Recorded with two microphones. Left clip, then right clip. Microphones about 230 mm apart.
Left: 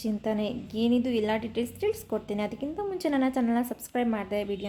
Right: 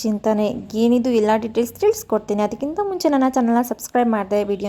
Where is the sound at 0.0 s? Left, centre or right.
Right.